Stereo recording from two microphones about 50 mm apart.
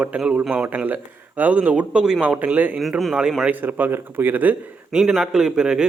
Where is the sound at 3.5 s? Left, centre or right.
Right.